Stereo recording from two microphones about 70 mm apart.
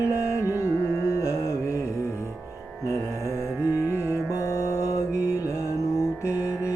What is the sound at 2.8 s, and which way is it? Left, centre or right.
Music, left.